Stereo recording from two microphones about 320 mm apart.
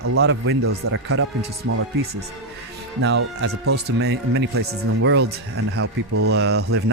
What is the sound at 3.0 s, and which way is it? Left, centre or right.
Speech, right.